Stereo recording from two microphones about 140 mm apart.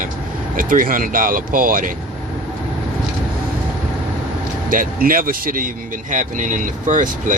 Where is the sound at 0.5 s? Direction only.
75° right (ahead or behind).